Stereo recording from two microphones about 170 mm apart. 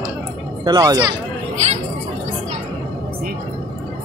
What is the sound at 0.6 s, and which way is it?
Speech, 25° right (ahead or behind).